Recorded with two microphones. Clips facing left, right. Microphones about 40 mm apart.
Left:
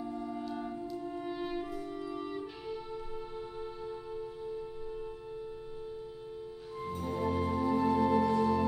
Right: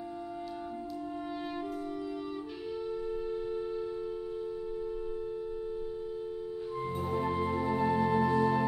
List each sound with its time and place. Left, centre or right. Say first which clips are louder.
2.9 s music: right 7 dB; centre
7.1 s music: even; centre